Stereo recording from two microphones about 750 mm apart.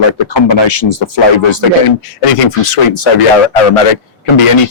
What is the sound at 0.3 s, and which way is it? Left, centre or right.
Speech, left.